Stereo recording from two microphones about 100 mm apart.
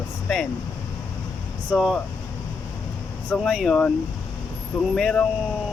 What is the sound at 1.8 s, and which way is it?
Speech, centre (ahead or behind).